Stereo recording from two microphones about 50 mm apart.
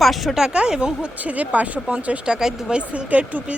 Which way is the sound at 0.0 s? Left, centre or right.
Centre.